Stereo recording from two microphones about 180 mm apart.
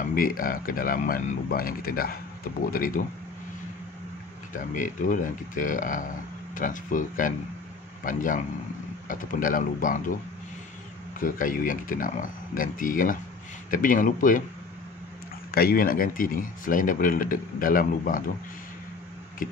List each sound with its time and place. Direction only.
0.0 s speech: 50° left (ahead or behind)
4.6 s speech: 45° left (ahead or behind)
11.1 s speech: 50° left (ahead or behind)
15.5 s speech: 55° left (ahead or behind)
19.4 s tick-tock: 50° left (ahead or behind)